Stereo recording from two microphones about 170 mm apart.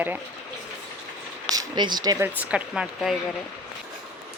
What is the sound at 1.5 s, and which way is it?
Speech, 25° right (ahead or behind).